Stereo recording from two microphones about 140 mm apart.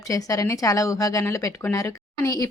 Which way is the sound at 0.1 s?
25° left (ahead or behind).